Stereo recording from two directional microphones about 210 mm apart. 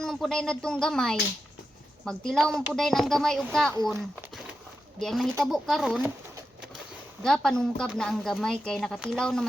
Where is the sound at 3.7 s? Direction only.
15° right (ahead or behind).